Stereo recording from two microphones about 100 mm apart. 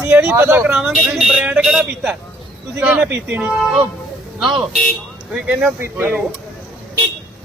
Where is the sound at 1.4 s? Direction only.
10° right (ahead or behind).